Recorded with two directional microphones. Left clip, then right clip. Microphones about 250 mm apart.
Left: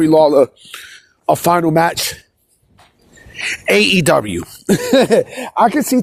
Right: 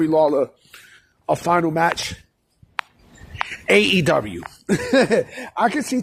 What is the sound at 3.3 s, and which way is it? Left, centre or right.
A man's voice, left.